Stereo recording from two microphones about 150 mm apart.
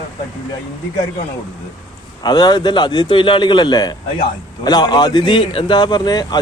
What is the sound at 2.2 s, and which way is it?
A man's voice, 25° left (ahead or behind).